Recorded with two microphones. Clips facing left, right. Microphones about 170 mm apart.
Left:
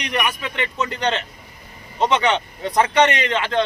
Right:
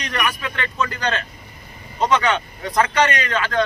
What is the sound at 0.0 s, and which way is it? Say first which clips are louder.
Speech: left 1 dB; 20° left (ahead or behind).